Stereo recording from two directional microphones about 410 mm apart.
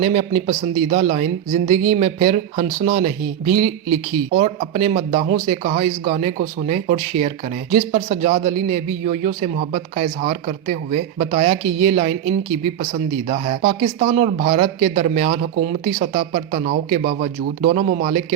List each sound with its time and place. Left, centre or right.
0.0 s speech: centre